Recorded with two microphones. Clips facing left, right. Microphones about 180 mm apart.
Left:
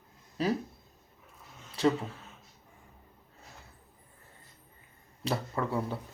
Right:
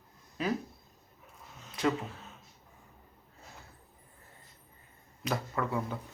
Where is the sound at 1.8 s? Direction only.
30° left (ahead or behind).